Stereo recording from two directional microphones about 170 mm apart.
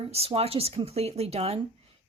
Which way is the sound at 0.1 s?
35° right (ahead or behind).